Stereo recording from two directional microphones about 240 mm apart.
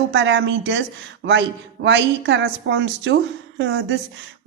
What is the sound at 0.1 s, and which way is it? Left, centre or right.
Speech, right.